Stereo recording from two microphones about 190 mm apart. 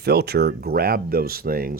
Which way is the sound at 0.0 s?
60° right (ahead or behind).